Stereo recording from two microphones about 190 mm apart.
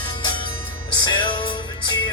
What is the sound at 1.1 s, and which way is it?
Music, 25° left (ahead or behind).